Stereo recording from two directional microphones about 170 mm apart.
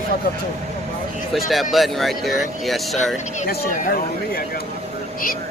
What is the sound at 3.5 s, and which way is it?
Speech, 55° left (ahead or behind).